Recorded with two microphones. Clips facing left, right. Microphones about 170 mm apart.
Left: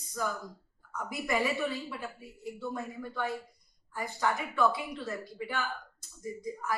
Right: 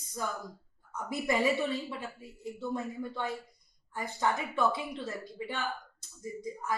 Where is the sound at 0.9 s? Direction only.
25° right (ahead or behind).